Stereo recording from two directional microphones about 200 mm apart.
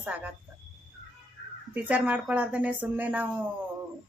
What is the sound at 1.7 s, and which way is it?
Speech, 5° right (ahead or behind).